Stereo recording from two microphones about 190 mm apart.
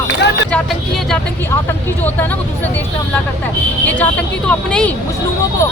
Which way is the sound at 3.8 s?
10° left (ahead or behind).